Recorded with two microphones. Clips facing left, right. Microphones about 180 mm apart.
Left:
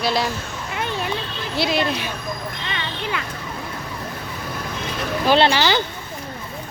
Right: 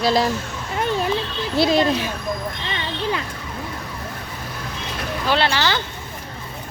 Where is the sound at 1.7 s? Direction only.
40° right (ahead or behind).